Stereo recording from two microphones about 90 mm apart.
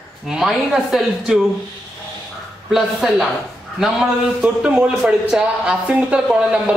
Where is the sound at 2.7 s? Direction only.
Centre (ahead or behind).